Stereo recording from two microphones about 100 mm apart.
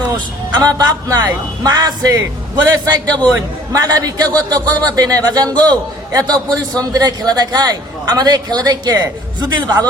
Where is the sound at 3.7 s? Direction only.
35° right (ahead or behind).